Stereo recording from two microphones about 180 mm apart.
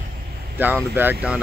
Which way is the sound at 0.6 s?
10° right (ahead or behind).